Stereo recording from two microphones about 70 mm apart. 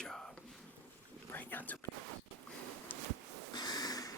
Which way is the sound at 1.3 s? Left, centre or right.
Left.